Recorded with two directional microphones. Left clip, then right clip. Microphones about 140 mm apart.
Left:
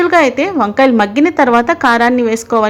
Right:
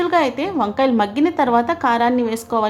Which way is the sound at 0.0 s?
25° left (ahead or behind).